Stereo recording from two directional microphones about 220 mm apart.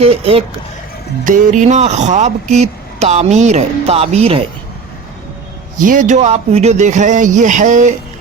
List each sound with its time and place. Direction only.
0.0 s speech: 25° right (ahead or behind)
1.2 s speech: 35° right (ahead or behind)
5.7 s speech: 35° right (ahead or behind)